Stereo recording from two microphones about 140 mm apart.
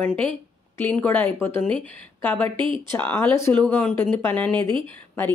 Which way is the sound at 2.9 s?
15° left (ahead or behind).